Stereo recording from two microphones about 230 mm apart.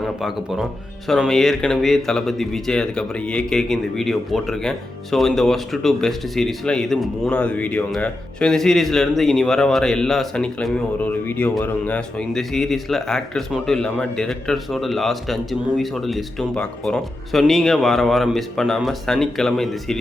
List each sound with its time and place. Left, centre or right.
0.0 s speech: centre